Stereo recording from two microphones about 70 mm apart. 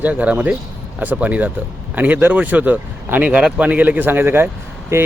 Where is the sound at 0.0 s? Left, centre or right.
Right.